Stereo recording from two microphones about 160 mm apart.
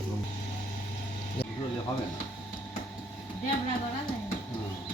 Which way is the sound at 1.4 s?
90° left.